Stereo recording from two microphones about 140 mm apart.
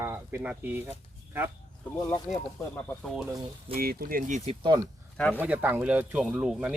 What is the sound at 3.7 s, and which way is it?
Speech, 90° right.